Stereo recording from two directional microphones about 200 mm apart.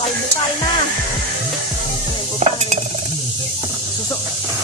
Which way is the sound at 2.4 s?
35° right (ahead or behind).